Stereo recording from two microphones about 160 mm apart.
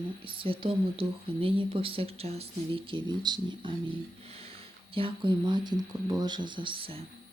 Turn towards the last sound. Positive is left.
turn(degrees=-35)  # may be behind; listen again after turning